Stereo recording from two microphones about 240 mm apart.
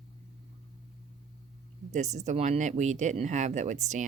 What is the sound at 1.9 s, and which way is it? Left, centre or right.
Speech, right.